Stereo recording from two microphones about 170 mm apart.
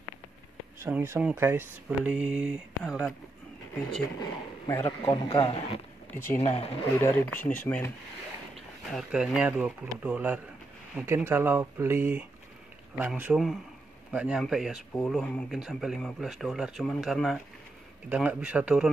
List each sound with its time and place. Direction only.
0.7 s speech: 15° right (ahead or behind)
4.6 s speech: 15° left (ahead or behind)
5.1 s a man's voice: 35° left (ahead or behind)
6.1 s speech: 10° left (ahead or behind)
6.4 s a man's voice: 40° left (ahead or behind)
7.0 s speech: 10° left (ahead or behind)
8.9 s speech: 5° right (ahead or behind)